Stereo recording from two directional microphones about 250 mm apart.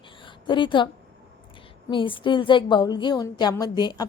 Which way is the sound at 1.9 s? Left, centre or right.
Centre.